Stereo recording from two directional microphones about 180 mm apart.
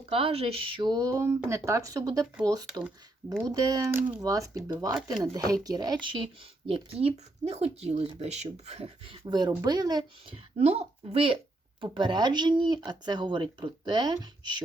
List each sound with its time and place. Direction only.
0.1 s speech: 30° right (ahead or behind)
9.2 s speech: 25° right (ahead or behind)
10.6 s speech: 35° right (ahead or behind)